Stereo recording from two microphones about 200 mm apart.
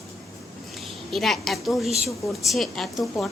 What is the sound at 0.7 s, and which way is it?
A woman's voice, centre (ahead or behind).